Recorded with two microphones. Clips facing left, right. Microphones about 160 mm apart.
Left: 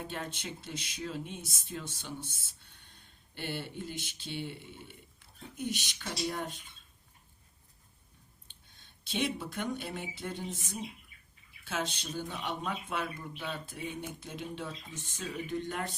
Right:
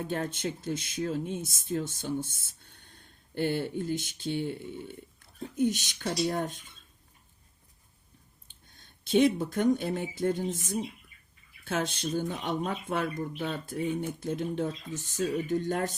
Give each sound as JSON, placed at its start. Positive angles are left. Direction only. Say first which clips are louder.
{"t": 0.1, "sound": "speech", "louder": "right 8 dB", "side_deg": -50}
{"t": 5.5, "sound": "speech", "louder": "right 9 dB", "side_deg": -50}
{"t": 8.7, "sound": "speech", "louder": "right 13 dB", "side_deg": -50}